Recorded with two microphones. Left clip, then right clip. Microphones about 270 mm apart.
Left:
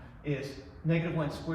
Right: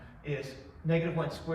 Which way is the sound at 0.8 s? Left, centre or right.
Centre.